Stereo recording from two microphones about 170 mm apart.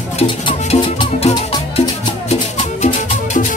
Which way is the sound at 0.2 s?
35° left (ahead or behind).